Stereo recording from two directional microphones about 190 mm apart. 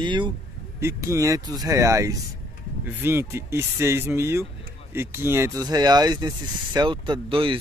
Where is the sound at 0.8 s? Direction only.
15° right (ahead or behind).